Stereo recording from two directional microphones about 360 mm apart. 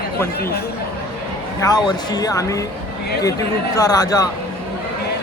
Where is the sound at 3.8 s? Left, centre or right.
Centre.